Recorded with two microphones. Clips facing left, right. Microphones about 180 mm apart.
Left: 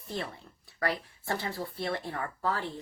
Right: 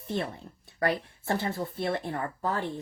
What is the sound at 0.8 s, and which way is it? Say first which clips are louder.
Speech: right 4 dB; 20° right (ahead or behind).